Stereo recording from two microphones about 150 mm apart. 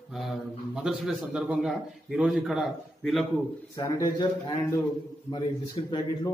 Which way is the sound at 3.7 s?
25° left (ahead or behind).